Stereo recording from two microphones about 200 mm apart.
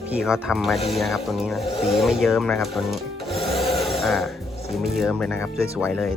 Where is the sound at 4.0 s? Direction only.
Centre (ahead or behind).